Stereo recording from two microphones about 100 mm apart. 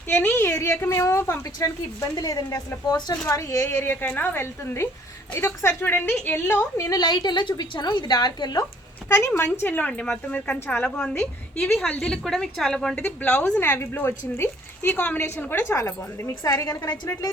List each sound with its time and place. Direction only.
0.1 s a woman's voice: 20° left (ahead or behind); by 8.6 s 45° left (ahead or behind)
9.0 s speech: 25° left (ahead or behind)
9.6 s a woman's voice: 20° left (ahead or behind)
13.6 s speech: 20° left (ahead or behind)
15.7 s a woman's voice: 30° left (ahead or behind)